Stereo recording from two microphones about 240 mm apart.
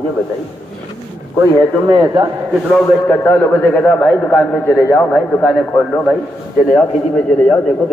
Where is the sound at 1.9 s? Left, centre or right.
Centre.